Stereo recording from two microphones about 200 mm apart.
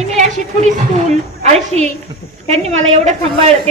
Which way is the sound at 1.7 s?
35° right (ahead or behind).